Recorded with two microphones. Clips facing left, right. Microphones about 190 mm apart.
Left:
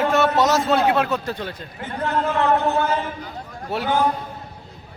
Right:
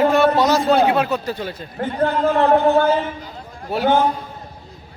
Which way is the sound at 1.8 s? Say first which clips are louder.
Right 5 dB; 35° right (ahead or behind).